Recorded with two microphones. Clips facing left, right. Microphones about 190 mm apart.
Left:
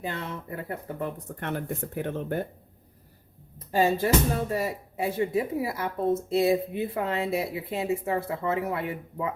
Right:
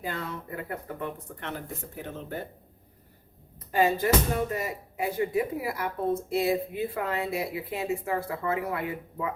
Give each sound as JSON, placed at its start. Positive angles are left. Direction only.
{"t": 0.0, "sound": "speech", "side_deg": 25}
{"t": 1.4, "sound": "speech", "side_deg": 55}
{"t": 3.7, "sound": "speech", "side_deg": 30}